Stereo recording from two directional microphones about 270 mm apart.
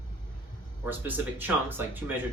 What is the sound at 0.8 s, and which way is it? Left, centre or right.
Speech, centre.